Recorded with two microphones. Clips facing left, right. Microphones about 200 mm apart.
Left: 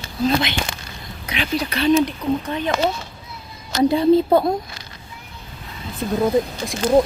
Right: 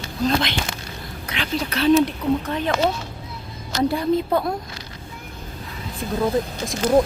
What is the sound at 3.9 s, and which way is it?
Speech, 25° left (ahead or behind).